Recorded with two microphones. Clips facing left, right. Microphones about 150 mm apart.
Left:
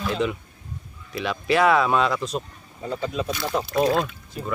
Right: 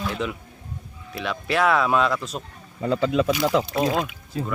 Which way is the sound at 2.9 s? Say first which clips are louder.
Right 6 dB; 85° right.